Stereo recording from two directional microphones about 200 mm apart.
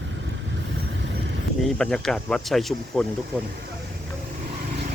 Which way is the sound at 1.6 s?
5° left (ahead or behind).